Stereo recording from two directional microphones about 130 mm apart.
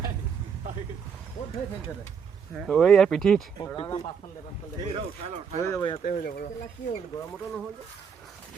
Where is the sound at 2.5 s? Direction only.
Centre (ahead or behind).